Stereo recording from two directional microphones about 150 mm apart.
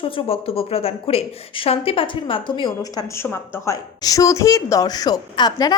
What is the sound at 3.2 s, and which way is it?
A woman's voice, 15° left (ahead or behind).